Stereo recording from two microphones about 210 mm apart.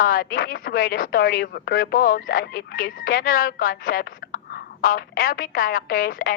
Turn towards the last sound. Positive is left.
turn(degrees=45)  # may be behind; listen again after turning